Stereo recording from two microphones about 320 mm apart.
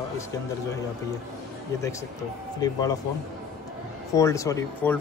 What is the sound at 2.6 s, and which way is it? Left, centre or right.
Speech, centre.